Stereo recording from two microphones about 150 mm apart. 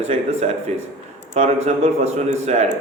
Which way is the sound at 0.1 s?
45° right (ahead or behind).